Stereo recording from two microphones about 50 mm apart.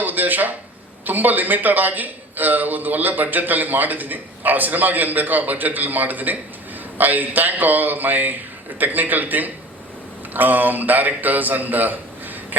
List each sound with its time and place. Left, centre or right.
0.0 s a man's voice: right